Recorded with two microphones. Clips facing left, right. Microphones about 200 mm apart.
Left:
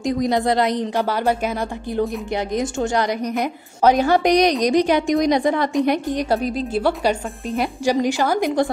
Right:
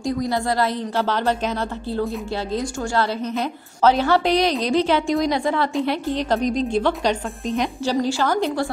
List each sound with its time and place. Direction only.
0.0 s a woman's voice: 20° left (ahead or behind)
2.5 s a woman's voice: 20° left (ahead or behind)